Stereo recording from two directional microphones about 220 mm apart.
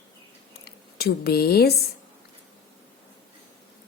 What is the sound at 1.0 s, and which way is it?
Speech, 45° left (ahead or behind).